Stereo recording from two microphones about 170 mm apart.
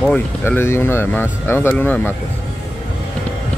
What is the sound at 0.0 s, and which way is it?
Speech, 10° left (ahead or behind).